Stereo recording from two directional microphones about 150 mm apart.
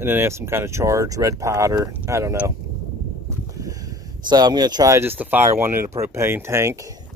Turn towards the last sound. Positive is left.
turn(degrees=-15)  # may be behind; listen again after turning